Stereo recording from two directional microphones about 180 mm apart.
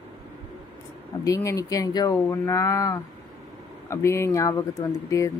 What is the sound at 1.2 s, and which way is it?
Speech, 20° left (ahead or behind).